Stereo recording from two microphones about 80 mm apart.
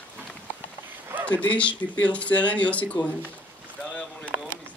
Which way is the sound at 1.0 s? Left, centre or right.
Right.